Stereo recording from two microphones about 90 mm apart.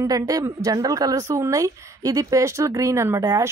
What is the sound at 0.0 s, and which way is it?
A woman's voice, 40° right (ahead or behind).